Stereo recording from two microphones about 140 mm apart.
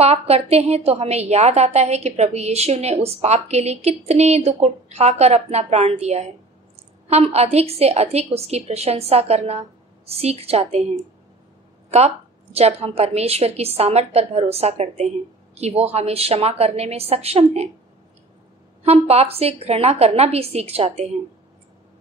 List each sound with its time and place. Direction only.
0.0 s a woman's voice: 50° right (ahead or behind)
12.5 s a woman's voice: 45° right (ahead or behind)
18.9 s a woman's voice: 45° right (ahead or behind)